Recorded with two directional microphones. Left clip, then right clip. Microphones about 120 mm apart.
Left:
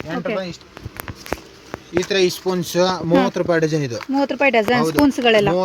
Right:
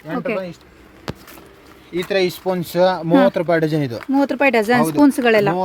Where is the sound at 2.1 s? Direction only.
75° right (ahead or behind).